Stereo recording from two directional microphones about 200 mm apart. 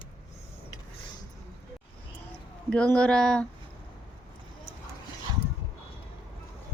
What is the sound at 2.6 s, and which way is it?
Speech, 5° left (ahead or behind).